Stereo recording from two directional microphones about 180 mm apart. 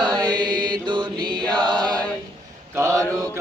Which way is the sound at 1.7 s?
25° right (ahead or behind).